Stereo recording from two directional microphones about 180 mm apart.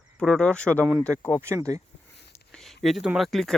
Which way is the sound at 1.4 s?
20° right (ahead or behind).